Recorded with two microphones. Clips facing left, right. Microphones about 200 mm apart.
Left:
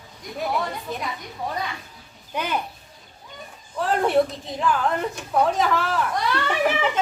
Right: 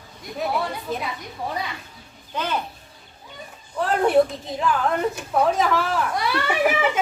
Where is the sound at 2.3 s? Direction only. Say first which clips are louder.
Even; 15° left (ahead or behind).